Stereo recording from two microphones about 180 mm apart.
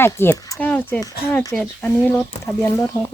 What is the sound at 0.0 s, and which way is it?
Speech, 15° left (ahead or behind).